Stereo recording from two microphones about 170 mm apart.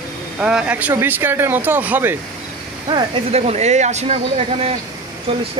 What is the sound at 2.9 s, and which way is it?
Speech, 30° right (ahead or behind).